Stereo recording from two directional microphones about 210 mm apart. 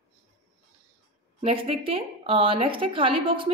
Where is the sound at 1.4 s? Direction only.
25° right (ahead or behind).